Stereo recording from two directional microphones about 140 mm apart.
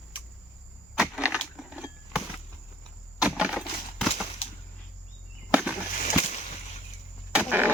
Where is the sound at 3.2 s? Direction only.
10° right (ahead or behind).